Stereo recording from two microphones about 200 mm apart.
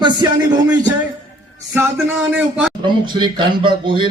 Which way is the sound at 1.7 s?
10° right (ahead or behind).